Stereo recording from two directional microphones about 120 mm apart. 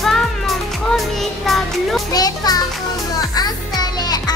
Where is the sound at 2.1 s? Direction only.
35° left (ahead or behind).